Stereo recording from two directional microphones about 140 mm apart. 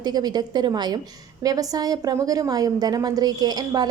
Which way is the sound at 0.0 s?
30° right (ahead or behind).